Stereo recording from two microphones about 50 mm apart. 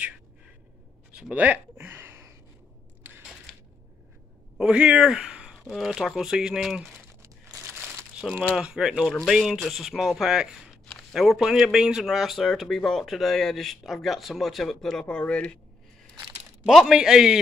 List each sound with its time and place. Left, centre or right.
1.3 s speech: right
1.8 s a sound: right
4.6 s speech: right
5.7 s speech: centre
7.2 s crumpling: right
8.2 s speech: centre
8.7 s a man's voice: centre
16.6 s a man's voice: centre